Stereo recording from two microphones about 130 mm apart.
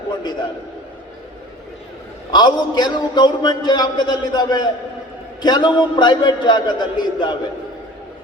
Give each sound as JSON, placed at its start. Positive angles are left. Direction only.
{"t": 2.3, "sound": "a man's voice", "side_deg": 35}